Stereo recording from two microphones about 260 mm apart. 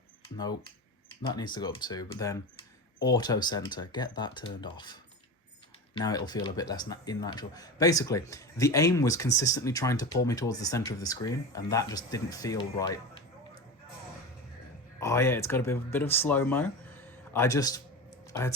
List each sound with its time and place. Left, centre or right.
1.3 s speech: centre
15.0 s speech: centre